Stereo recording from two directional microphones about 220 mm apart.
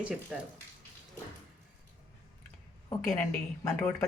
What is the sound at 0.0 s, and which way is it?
Speech, 5° right (ahead or behind).